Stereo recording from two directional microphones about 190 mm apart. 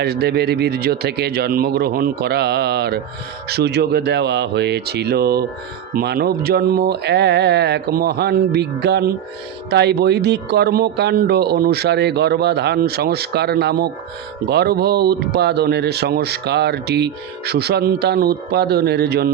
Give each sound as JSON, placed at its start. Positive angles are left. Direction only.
{"t": 0.0, "sound": "speech", "side_deg": -60}